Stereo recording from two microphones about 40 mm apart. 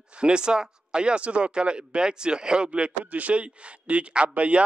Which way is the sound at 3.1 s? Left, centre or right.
Right.